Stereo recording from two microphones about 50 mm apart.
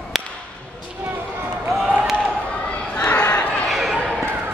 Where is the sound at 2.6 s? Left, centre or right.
Left.